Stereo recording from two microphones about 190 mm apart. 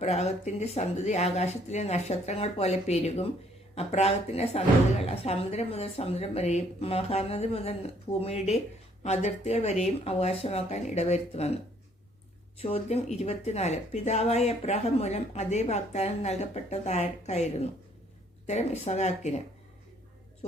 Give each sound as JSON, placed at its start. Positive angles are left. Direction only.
{"t": 0.0, "sound": "a woman's voice", "side_deg": 35}